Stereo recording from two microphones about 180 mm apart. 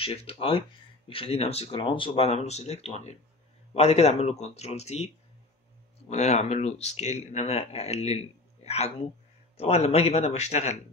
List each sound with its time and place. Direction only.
0.0 s speech: 30° left (ahead or behind)